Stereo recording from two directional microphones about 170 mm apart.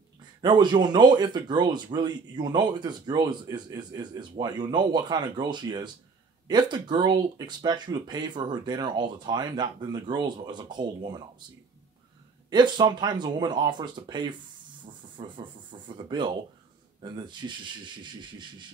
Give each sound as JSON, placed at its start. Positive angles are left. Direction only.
{"t": 0.4, "sound": "speech", "side_deg": -25}
{"t": 12.4, "sound": "speech", "side_deg": -25}
{"t": 14.9, "sound": "rub", "side_deg": -30}
{"t": 17.0, "sound": "speech", "side_deg": -25}